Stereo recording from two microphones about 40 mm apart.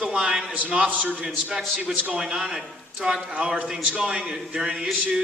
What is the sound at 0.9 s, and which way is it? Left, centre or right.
Speech, right.